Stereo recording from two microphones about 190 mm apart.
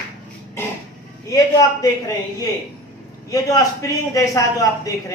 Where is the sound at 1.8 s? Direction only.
20° left (ahead or behind).